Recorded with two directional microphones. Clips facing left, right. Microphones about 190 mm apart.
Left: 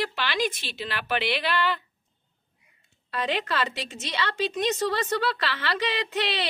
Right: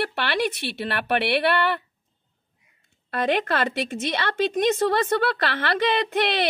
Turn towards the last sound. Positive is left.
turn(degrees=-55)  # may be behind; listen again after turning